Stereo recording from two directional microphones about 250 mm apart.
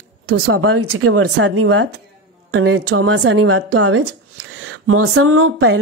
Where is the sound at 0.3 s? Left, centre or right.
Right.